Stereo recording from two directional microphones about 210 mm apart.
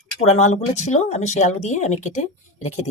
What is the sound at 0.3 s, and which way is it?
Speech, 30° left (ahead or behind).